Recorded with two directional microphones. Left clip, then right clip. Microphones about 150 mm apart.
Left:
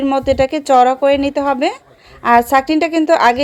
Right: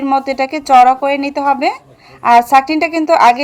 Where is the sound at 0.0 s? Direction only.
40° left (ahead or behind).